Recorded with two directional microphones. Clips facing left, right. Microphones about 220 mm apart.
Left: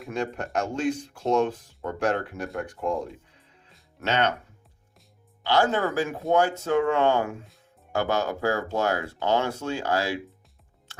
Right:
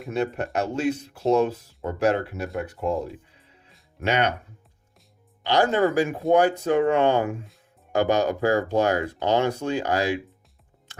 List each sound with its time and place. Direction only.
0.0 s speech: 5° right (ahead or behind)
5.4 s speech: 15° right (ahead or behind)